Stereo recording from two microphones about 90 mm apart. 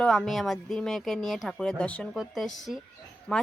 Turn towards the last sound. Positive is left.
turn(degrees=10)  # may be behind; listen again after turning